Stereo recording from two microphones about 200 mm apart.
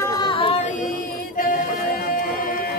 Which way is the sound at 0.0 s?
20° left (ahead or behind).